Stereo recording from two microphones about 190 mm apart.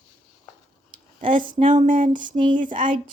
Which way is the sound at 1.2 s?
45° right (ahead or behind).